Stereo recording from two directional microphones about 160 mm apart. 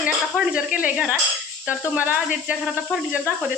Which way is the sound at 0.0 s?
5° right (ahead or behind).